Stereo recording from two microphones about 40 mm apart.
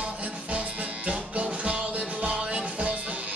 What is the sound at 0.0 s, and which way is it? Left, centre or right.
Music, right.